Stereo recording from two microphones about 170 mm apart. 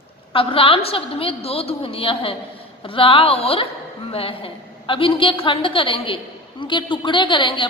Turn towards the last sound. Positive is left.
turn(degrees=30)  # may be behind; listen again after turning